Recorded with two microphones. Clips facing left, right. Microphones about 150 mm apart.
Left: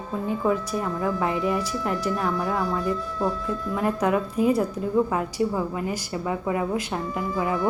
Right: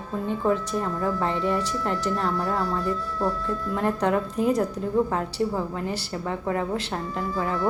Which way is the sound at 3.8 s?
5° left (ahead or behind).